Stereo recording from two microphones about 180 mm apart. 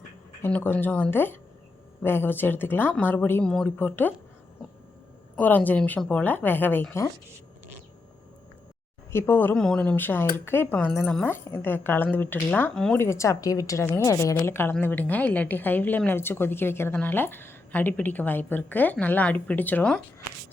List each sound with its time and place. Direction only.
0.4 s a woman's voice: 10° left (ahead or behind)
5.4 s a woman's voice: 10° left (ahead or behind)
9.1 s a woman's voice: 10° left (ahead or behind)
13.0 s a woman's voice: 15° left (ahead or behind)